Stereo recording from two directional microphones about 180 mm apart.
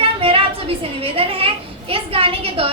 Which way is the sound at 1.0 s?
30° right (ahead or behind).